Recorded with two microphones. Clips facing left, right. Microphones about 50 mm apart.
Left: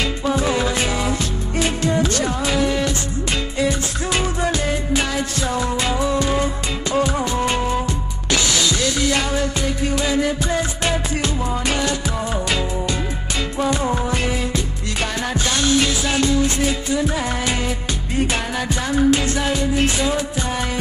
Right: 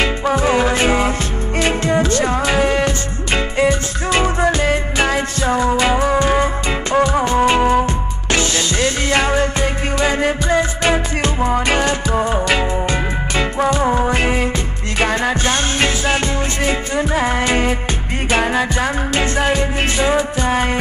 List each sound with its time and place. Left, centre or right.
0.0 s music: right
13.7 s music: right